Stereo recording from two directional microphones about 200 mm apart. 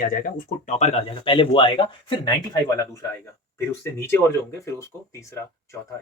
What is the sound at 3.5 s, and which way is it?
Speech, 15° left (ahead or behind).